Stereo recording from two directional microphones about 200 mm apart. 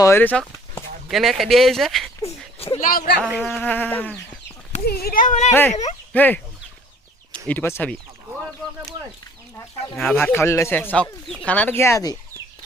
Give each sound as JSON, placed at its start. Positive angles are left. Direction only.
{"t": 0.0, "sound": "speech", "side_deg": 10}
{"t": 2.6, "sound": "a sound", "side_deg": 30}
{"t": 2.8, "sound": "speech", "side_deg": 45}
{"t": 3.2, "sound": "insect", "side_deg": -5}
{"t": 3.5, "sound": "speech", "side_deg": 10}
{"t": 4.9, "sound": "speech", "side_deg": 50}
{"t": 6.1, "sound": "speech", "side_deg": 10}
{"t": 10.0, "sound": "speech", "side_deg": 5}